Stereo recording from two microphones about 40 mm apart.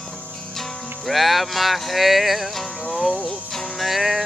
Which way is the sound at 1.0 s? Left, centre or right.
Centre.